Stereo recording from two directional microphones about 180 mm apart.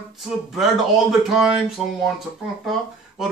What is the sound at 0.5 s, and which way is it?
A man's voice, centre (ahead or behind).